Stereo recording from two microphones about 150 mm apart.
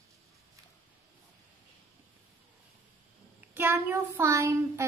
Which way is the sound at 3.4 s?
10° right (ahead or behind).